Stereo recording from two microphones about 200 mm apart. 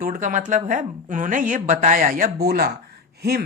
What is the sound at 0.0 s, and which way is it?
A woman's voice, 40° right (ahead or behind).